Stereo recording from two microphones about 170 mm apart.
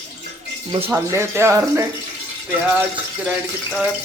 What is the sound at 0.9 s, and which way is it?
Speech, 15° right (ahead or behind).